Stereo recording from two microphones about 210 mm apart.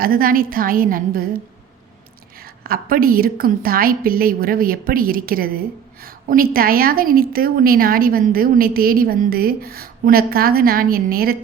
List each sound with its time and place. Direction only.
0.0 s a woman's voice: 45° right (ahead or behind)
2.4 s a woman's voice: 45° right (ahead or behind)